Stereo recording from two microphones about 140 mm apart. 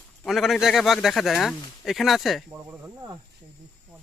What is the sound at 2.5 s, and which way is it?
Speech, 15° right (ahead or behind).